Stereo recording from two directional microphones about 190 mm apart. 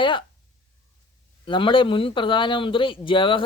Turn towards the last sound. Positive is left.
turn(degrees=25)  # may be behind; listen again after turning